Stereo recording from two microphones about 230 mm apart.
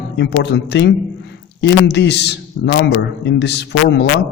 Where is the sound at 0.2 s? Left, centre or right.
Left.